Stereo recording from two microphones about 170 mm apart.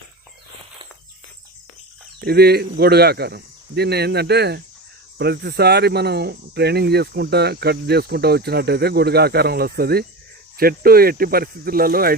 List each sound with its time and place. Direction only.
2.2 s speech: 70° right (ahead or behind)